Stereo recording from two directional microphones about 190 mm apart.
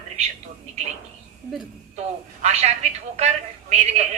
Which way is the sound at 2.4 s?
35° right (ahead or behind).